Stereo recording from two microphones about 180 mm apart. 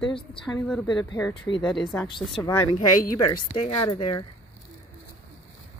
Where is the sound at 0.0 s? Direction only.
25° left (ahead or behind).